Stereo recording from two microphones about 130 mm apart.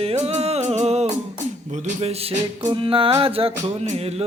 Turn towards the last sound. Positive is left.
turn(degrees=-55)  # may be behind; listen again after turning